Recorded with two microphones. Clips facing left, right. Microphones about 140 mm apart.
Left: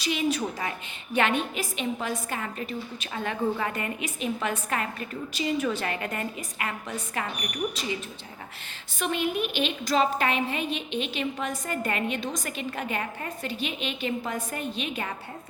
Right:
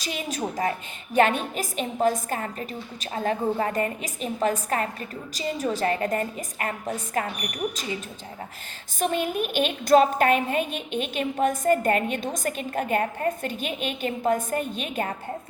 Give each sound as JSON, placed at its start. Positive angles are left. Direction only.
{"t": 0.0, "sound": "a woman's voice", "side_deg": -45}
{"t": 9.0, "sound": "a woman's voice", "side_deg": -45}